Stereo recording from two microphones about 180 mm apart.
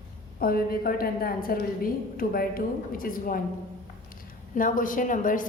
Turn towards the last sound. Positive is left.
turn(degrees=50)  # may be behind; listen again after turning